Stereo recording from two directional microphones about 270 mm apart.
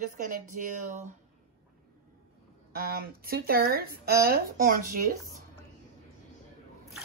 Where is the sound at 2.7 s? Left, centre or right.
Right.